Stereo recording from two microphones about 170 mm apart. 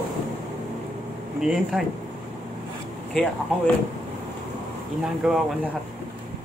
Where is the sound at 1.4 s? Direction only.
Centre (ahead or behind).